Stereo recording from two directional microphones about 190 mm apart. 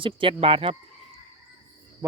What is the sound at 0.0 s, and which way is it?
Speech, 25° right (ahead or behind).